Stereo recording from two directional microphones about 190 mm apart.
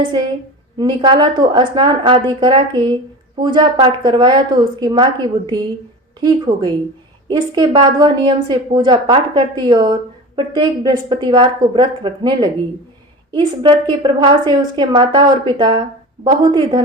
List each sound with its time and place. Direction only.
0.8 s a woman's voice: 25° right (ahead or behind)